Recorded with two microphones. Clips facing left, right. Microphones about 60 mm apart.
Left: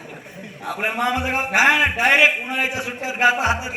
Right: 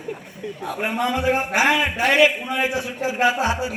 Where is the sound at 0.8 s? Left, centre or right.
Left.